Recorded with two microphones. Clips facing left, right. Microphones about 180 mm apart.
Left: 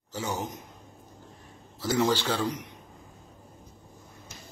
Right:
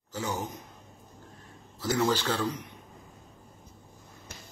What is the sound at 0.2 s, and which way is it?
Speech, 20° left (ahead or behind).